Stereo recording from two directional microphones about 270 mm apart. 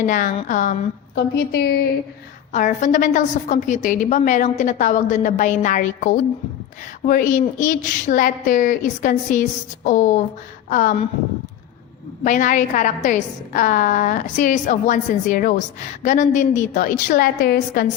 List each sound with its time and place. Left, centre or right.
0.0 s a woman's voice: left
12.2 s a woman's voice: left